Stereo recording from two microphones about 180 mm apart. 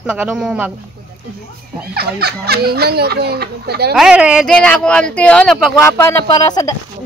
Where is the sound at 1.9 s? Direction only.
60° right (ahead or behind).